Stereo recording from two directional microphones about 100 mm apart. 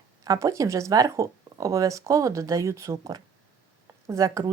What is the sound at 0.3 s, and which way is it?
Speech, 35° right (ahead or behind).